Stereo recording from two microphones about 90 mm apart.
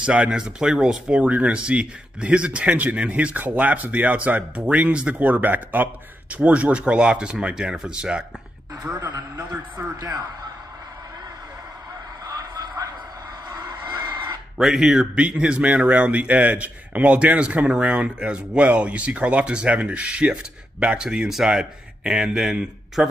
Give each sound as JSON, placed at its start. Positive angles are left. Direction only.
{"t": 0.0, "sound": "speech", "side_deg": -15}
{"t": 9.1, "sound": "a man's voice", "side_deg": -50}
{"t": 12.3, "sound": "a sound", "side_deg": -45}
{"t": 14.6, "sound": "speech", "side_deg": -5}